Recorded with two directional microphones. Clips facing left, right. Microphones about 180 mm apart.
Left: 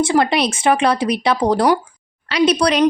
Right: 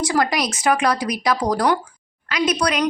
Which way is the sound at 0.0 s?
25° left (ahead or behind).